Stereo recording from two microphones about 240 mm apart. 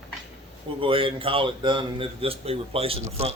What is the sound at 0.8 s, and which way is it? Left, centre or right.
A man's voice, right.